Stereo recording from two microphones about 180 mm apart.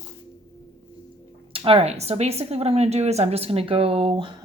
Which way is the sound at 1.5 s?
30° right (ahead or behind).